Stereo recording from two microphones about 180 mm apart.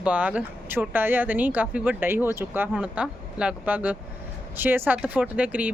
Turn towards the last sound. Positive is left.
turn(degrees=-5)  # may be behind; listen again after turning